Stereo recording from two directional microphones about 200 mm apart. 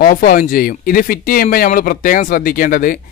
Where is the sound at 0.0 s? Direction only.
45° left (ahead or behind).